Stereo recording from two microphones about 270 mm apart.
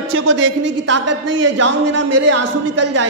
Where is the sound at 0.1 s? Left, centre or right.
Right.